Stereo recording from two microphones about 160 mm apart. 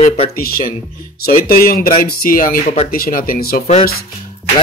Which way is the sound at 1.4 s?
65° left (ahead or behind).